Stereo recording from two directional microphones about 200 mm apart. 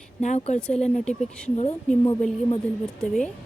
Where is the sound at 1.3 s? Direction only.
5° left (ahead or behind).